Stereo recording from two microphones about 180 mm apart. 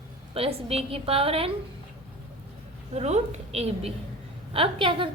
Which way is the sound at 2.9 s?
35° right (ahead or behind).